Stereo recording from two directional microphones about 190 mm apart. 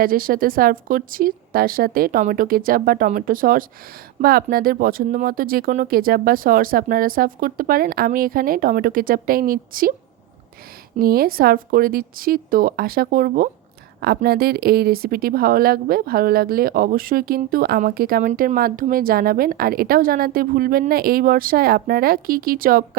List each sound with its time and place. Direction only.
0.0 s speech: 50° right (ahead or behind)
11.0 s speech: 50° right (ahead or behind)